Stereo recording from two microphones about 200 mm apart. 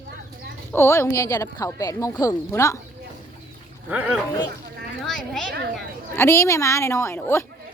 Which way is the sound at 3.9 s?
5° right (ahead or behind).